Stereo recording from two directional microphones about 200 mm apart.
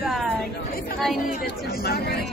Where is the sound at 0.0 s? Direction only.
Centre (ahead or behind).